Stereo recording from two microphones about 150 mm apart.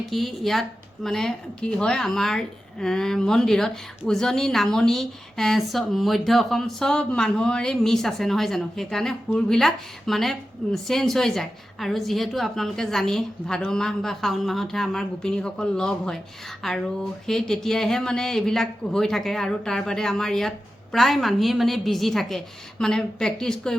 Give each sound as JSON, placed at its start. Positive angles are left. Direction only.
{"t": 0.0, "sound": "speech", "side_deg": 0}